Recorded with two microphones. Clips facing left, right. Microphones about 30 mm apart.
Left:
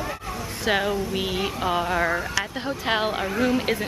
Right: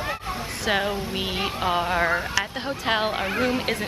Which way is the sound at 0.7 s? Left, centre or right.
Centre.